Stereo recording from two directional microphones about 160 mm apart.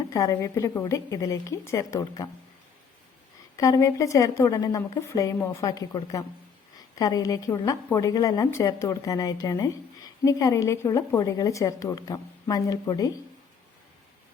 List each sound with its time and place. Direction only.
0.1 s a woman's voice: 20° left (ahead or behind)
3.6 s a woman's voice: 20° left (ahead or behind)